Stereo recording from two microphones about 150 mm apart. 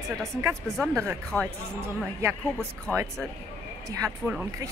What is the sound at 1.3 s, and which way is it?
Speech, 15° left (ahead or behind).